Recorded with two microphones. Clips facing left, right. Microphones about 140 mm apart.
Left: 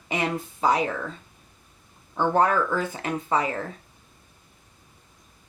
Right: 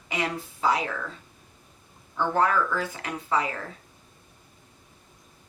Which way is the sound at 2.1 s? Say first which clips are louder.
Left 2 dB; 25° left (ahead or behind).